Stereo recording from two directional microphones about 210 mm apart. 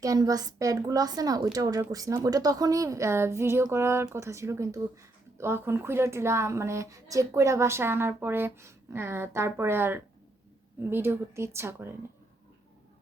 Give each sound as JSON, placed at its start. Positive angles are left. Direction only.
{"t": 0.0, "sound": "speech", "side_deg": -15}